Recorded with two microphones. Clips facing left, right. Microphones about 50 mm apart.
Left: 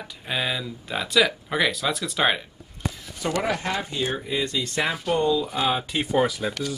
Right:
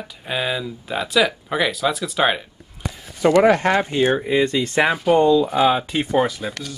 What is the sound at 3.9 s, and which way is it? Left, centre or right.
Speech, right.